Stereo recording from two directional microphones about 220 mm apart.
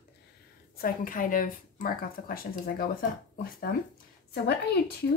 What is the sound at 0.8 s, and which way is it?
Speech, 40° left (ahead or behind).